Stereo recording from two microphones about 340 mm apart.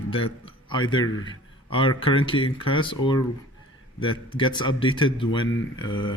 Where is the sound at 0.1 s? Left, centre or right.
Centre.